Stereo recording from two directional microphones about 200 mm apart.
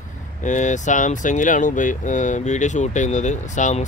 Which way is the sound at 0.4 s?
40° left (ahead or behind).